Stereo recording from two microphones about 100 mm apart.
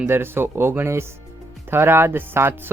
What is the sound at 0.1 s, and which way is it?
Speech, 25° right (ahead or behind).